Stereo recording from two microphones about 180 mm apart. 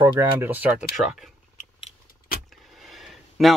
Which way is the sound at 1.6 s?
50° left (ahead or behind).